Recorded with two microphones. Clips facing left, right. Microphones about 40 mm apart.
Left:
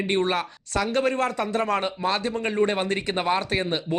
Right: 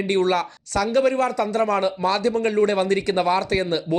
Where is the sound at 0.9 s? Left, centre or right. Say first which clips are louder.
Right 5 dB; left.